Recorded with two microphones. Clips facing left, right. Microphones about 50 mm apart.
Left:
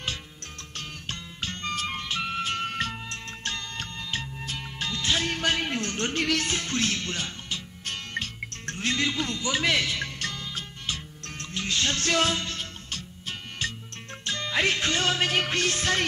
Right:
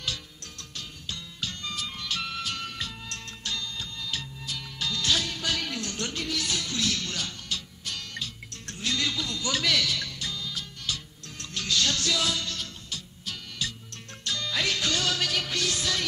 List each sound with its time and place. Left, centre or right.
0.7 s music: left
2.0 s music: left
4.0 s music: left
5.2 s music: left
6.4 s speech: left
7.8 s music: left
10.1 s music: left